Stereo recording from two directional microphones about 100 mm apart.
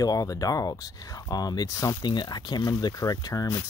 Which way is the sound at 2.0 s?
45° left (ahead or behind).